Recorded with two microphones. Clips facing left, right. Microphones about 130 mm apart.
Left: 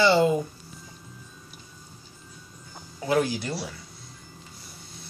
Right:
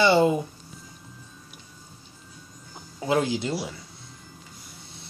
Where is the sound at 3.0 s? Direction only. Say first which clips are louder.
Even; 20° right (ahead or behind).